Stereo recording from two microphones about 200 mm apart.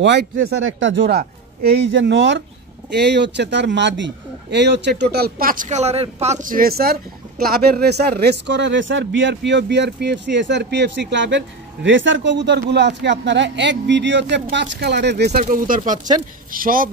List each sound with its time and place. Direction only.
0.0 s speech: 60° right (ahead or behind)